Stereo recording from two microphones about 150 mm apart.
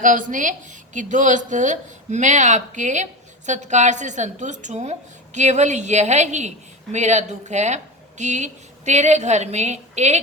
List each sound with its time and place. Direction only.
0.0 s a woman's voice: 60° right (ahead or behind)